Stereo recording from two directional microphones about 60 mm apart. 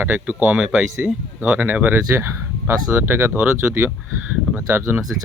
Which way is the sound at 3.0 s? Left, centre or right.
Right.